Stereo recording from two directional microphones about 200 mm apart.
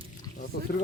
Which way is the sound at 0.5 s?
50° left (ahead or behind).